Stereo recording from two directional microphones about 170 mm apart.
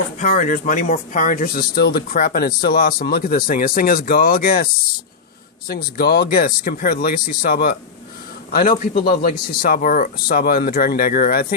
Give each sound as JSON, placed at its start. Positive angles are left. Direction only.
{"t": 0.2, "sound": "speech", "side_deg": 50}